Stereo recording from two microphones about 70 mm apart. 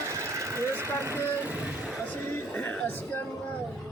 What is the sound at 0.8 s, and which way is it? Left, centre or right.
Speech, right.